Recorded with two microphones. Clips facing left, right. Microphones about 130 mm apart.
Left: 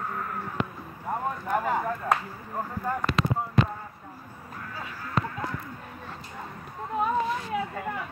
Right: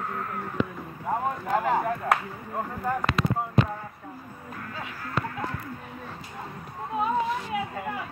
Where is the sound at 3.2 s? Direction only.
90° left.